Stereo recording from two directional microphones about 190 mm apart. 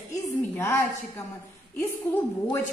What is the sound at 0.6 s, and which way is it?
Speech, 15° left (ahead or behind).